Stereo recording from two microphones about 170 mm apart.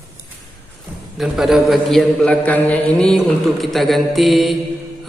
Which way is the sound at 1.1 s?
Centre (ahead or behind).